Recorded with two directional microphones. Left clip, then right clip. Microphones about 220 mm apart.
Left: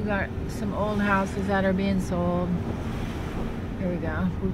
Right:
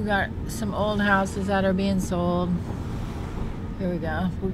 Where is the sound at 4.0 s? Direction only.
15° right (ahead or behind).